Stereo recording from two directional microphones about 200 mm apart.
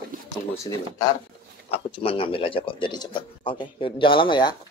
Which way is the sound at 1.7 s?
25° left (ahead or behind).